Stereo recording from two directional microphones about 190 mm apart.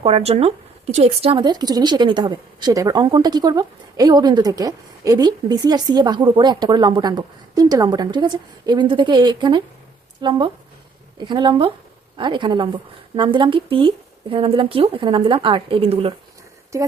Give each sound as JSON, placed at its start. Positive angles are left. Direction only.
{"t": 0.0, "sound": "speech", "side_deg": -30}